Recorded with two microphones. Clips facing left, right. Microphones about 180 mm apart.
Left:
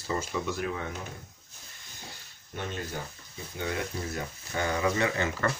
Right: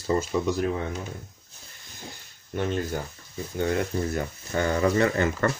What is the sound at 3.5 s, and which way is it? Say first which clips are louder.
Speech: right 7 dB; 45° right (ahead or behind).